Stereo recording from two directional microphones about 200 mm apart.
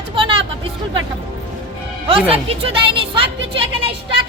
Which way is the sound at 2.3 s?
30° right (ahead or behind).